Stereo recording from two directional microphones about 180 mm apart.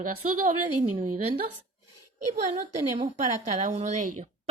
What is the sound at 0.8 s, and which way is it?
Speech, 45° right (ahead or behind).